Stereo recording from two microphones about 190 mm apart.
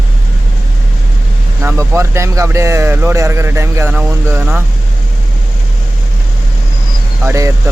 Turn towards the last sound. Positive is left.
turn(degrees=-15)  # may be behind; listen again after turning